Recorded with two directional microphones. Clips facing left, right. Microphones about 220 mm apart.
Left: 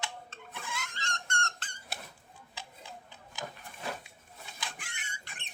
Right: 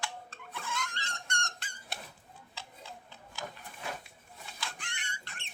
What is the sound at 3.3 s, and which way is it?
Wood, 15° left (ahead or behind).